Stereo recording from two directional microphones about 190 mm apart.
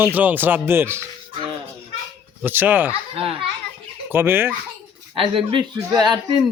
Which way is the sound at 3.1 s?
30° right (ahead or behind).